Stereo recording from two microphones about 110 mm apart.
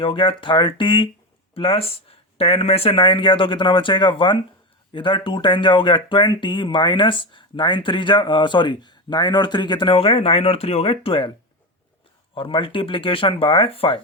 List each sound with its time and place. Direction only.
0.0 s speech: 50° left (ahead or behind)
12.3 s speech: 50° left (ahead or behind)